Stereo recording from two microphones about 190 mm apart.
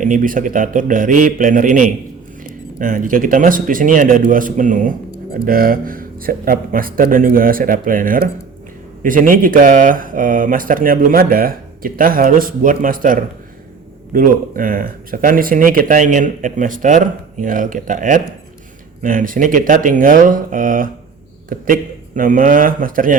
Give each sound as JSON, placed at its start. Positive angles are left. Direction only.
{"t": 0.0, "sound": "speech", "side_deg": -45}